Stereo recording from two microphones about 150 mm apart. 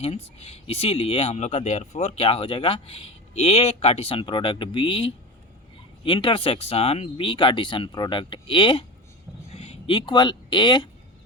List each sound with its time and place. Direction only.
0.0 s speech: 45° left (ahead or behind)
2.2 s speech: 35° left (ahead or behind)